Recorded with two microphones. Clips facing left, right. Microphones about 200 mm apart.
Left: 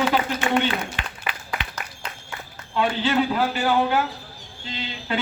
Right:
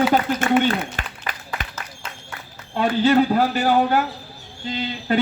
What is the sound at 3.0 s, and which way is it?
Speech, 45° right (ahead or behind).